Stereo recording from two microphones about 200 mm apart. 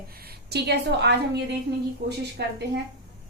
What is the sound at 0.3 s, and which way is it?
Speech, 55° right (ahead or behind).